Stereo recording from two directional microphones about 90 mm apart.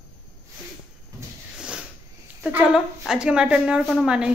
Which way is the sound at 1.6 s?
10° right (ahead or behind).